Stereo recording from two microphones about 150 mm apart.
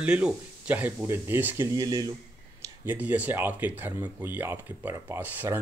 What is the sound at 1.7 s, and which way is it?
Speech, 25° right (ahead or behind).